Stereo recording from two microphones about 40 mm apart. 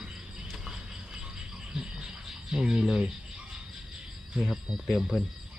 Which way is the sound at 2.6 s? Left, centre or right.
Right.